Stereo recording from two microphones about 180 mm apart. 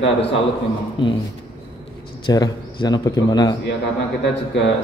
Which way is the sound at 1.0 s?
25° left (ahead or behind).